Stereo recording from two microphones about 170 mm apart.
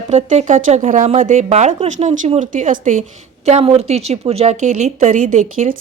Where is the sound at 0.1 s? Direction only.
40° right (ahead or behind).